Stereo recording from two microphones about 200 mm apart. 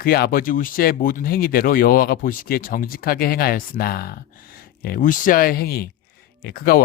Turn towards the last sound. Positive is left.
turn(degrees=50)  # may be behind; listen again after turning